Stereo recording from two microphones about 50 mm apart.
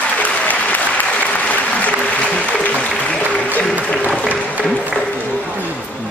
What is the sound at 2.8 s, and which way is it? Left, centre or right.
Music, left.